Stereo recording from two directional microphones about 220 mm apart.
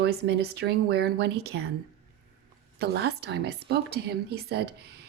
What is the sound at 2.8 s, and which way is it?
Speech, 50° right (ahead or behind).